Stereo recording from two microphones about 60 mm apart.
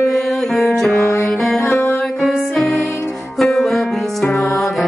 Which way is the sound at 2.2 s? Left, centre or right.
Centre.